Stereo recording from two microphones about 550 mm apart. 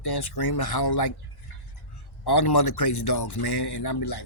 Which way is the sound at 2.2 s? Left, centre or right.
Left.